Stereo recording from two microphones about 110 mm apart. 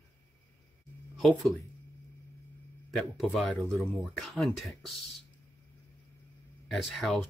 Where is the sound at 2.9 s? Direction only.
5° left (ahead or behind).